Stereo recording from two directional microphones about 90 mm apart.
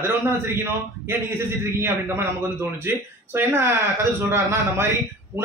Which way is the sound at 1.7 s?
30° right (ahead or behind).